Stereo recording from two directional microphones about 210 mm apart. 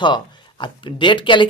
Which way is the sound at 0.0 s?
20° left (ahead or behind).